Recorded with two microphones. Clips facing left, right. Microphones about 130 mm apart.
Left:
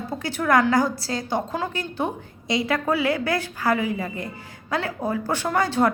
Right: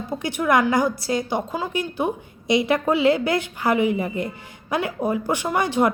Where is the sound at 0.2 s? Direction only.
15° right (ahead or behind).